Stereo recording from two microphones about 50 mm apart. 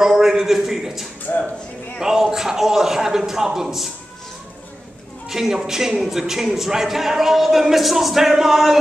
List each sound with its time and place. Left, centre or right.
0.0 s a sound: centre
1.3 s speech: left
2.0 s a man's voice: centre
5.3 s a man's voice: centre